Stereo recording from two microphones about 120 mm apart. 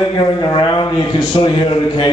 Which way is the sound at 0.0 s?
35° left (ahead or behind).